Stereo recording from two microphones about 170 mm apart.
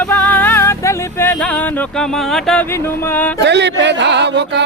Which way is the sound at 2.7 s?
15° left (ahead or behind).